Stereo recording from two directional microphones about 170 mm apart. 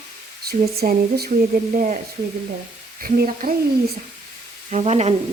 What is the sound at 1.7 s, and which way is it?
Speech, 50° right (ahead or behind).